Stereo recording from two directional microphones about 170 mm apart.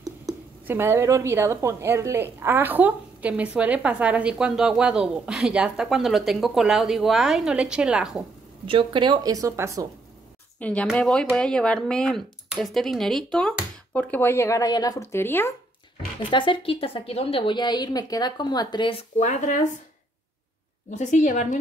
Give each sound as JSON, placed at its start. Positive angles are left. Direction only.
{"t": 0.0, "sound": "speech", "side_deg": -15}
{"t": 8.6, "sound": "speech", "side_deg": -30}
{"t": 10.6, "sound": "speech", "side_deg": 5}
{"t": 16.2, "sound": "a woman's voice", "side_deg": 30}
{"t": 19.1, "sound": "speech", "side_deg": 45}
{"t": 20.9, "sound": "speech", "side_deg": 45}